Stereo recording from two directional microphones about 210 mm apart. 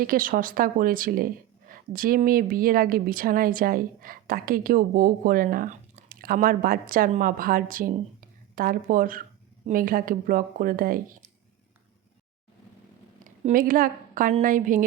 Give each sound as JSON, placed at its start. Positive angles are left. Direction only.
{"t": 0.0, "sound": "a woman's voice", "side_deg": -40}
{"t": 13.2, "sound": "a woman's voice", "side_deg": -40}